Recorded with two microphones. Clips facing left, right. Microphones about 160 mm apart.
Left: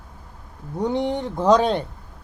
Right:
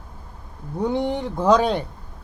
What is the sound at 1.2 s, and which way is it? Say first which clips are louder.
Speech: left 1 dB; 20° left (ahead or behind).